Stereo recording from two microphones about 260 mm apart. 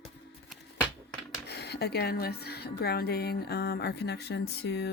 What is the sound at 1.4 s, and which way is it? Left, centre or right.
Speech, left.